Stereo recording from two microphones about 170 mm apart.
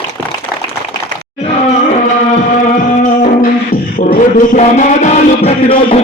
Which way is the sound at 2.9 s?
50° left (ahead or behind).